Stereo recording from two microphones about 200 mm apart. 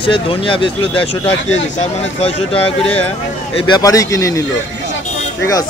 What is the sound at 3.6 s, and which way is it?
Speech, 20° left (ahead or behind).